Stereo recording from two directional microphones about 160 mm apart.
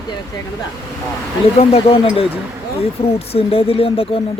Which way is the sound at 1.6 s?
35° left (ahead or behind).